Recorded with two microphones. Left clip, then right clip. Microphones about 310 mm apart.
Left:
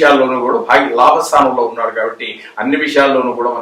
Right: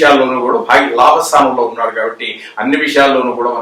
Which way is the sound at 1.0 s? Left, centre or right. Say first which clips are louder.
Even; centre.